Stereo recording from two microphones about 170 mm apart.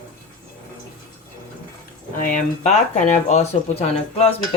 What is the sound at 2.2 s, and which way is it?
Speech, 50° left (ahead or behind).